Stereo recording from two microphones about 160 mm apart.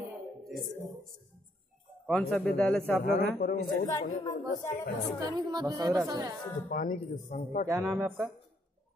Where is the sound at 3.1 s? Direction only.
55° left (ahead or behind).